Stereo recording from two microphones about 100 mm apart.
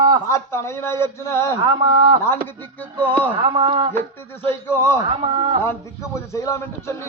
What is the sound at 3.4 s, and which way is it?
Speech, 50° right (ahead or behind).